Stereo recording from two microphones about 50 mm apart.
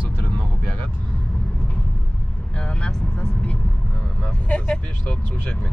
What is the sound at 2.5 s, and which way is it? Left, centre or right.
Speech, centre.